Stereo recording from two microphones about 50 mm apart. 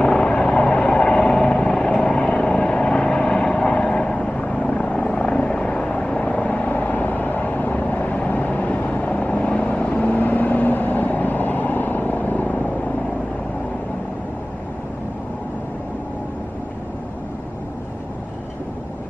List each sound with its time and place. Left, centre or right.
0.0 s vehicle: centre; by 12.6 s left